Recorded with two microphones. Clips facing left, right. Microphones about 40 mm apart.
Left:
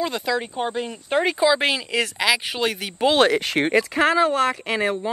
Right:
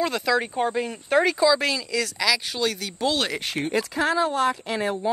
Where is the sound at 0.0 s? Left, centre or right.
Centre.